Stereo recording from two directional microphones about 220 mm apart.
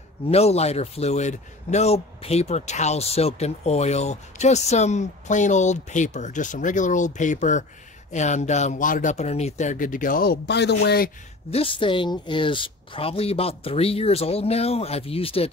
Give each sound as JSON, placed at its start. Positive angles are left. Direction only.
{"t": 0.3, "sound": "a man's voice", "side_deg": 30}
{"t": 11.5, "sound": "a woman's voice", "side_deg": 25}